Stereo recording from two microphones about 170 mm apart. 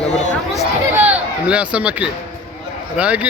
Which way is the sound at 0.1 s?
45° left (ahead or behind).